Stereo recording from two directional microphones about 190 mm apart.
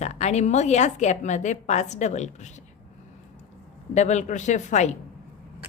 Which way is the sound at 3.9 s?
40° left (ahead or behind).